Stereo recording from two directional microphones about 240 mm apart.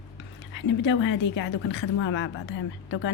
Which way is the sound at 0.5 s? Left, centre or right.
Left.